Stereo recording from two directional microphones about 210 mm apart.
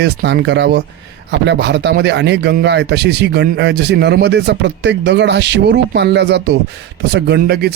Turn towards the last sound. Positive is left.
turn(degrees=-50)  # may be behind; listen again after turning